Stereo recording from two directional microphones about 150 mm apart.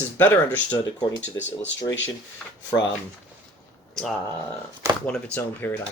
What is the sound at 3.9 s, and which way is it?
Speech, centre (ahead or behind).